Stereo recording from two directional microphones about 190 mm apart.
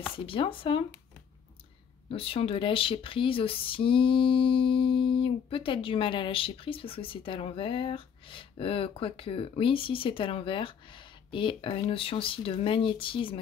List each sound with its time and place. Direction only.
0.1 s speech: 25° left (ahead or behind)
2.0 s speech: 30° left (ahead or behind)